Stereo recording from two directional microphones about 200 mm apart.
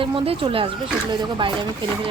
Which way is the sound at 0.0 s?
25° right (ahead or behind).